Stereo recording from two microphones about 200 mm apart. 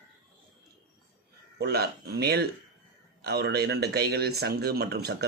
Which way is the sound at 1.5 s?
55° right (ahead or behind).